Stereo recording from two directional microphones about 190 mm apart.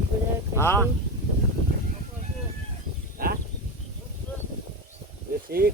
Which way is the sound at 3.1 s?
50° right (ahead or behind).